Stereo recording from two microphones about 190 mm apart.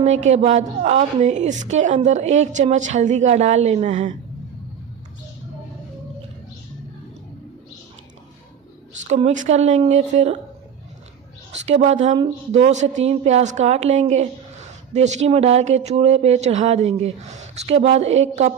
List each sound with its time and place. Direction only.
0.0 s a woman's voice: 35° right (ahead or behind)
9.0 s a woman's voice: 35° right (ahead or behind)
11.6 s a woman's voice: 35° right (ahead or behind)